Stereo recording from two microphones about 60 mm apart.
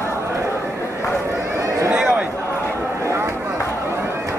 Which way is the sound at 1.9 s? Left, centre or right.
Centre.